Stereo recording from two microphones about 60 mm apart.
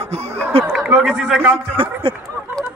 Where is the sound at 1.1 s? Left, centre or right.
Centre.